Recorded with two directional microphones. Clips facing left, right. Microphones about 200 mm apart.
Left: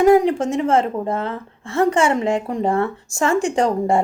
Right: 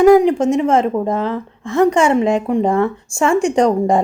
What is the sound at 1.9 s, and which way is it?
Speech, 30° right (ahead or behind).